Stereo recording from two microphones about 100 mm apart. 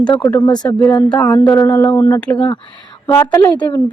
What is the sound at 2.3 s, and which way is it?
Speech, 60° left (ahead or behind).